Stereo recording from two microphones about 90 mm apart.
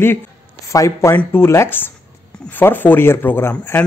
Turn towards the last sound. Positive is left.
turn(degrees=20)  # may be behind; listen again after turning